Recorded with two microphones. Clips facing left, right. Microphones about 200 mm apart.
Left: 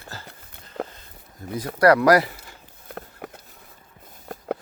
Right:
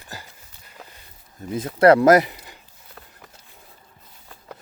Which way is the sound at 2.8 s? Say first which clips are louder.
Left 11 dB; 60° left (ahead or behind).